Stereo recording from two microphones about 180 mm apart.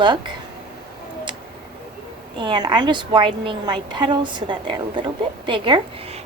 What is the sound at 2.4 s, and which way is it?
A woman's voice, 25° right (ahead or behind).